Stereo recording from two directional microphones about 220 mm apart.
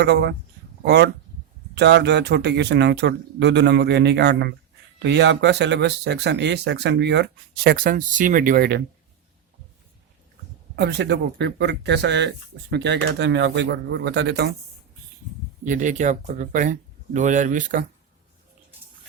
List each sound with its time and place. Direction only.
0.0 s speech: 50° right (ahead or behind)
10.8 s speech: 50° right (ahead or behind)
15.6 s speech: 35° right (ahead or behind)